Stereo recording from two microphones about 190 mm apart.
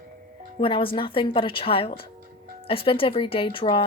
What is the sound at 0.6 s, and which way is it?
A woman's voice, 30° left (ahead or behind).